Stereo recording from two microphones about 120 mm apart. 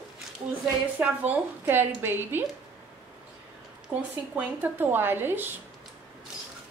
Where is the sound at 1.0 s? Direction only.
15° right (ahead or behind).